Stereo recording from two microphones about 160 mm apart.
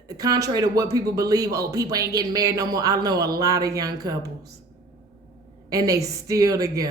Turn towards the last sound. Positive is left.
turn(degrees=-20)  # may be behind; listen again after turning